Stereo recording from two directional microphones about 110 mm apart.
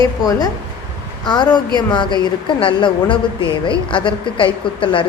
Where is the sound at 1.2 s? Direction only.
40° left (ahead or behind).